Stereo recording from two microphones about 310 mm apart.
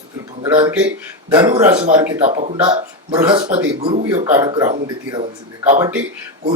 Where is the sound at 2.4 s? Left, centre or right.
Centre.